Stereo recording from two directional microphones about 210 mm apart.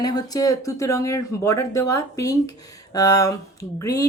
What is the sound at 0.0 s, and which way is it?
Speech, 20° left (ahead or behind).